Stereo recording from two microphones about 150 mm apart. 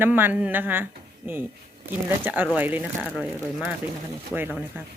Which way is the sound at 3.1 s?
5° left (ahead or behind).